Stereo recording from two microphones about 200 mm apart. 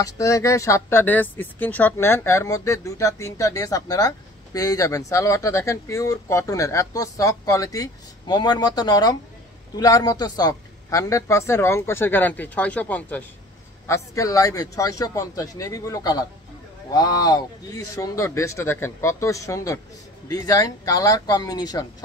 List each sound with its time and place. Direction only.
0.0 s speech: 15° left (ahead or behind)